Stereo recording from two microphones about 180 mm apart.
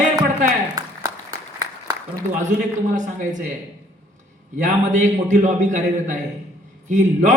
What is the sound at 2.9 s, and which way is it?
Speech, 45° right (ahead or behind).